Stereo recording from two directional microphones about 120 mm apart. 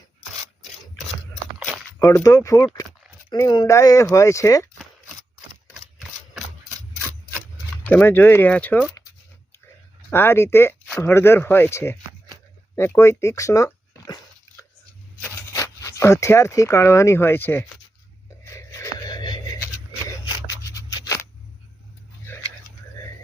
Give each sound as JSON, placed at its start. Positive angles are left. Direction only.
{"t": 2.2, "sound": "speech", "side_deg": 25}
{"t": 7.9, "sound": "speech", "side_deg": 15}
{"t": 10.1, "sound": "speech", "side_deg": 20}
{"t": 15.2, "sound": "speech", "side_deg": 20}
{"t": 18.4, "sound": "a sound", "side_deg": 25}
{"t": 20.2, "sound": "scissors", "side_deg": 30}